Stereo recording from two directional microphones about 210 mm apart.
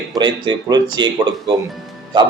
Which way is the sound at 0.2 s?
20° right (ahead or behind).